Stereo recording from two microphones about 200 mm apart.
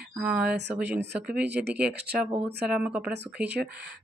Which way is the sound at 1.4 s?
55° right (ahead or behind).